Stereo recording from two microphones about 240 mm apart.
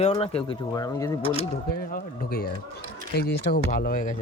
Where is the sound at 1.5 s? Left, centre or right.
Left.